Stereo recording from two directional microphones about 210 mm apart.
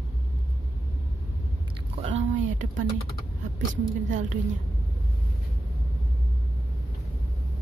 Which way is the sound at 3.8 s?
35° right (ahead or behind).